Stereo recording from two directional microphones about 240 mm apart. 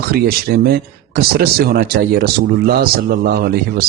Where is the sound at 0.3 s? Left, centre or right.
Right.